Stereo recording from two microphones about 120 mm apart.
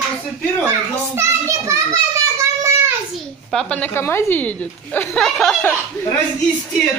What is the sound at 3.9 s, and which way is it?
Speech, 20° left (ahead or behind).